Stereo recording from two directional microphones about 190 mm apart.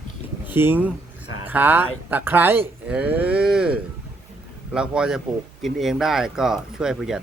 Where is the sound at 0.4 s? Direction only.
10° right (ahead or behind).